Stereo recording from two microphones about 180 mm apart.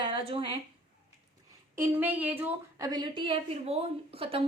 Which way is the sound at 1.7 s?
15° right (ahead or behind).